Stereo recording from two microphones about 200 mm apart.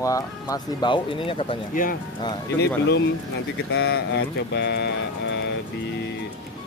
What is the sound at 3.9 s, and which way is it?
Speech, 60° left (ahead or behind).